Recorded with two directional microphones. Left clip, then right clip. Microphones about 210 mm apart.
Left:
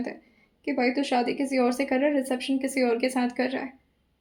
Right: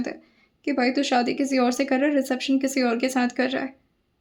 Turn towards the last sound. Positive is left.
turn(degrees=-35)  # may be behind; listen again after turning